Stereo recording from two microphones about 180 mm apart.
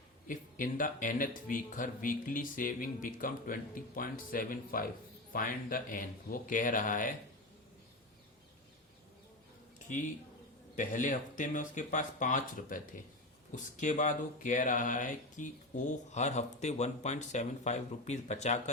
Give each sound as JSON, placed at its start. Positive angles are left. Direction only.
{"t": 0.3, "sound": "speech", "side_deg": 45}
{"t": 10.8, "sound": "speech", "side_deg": 45}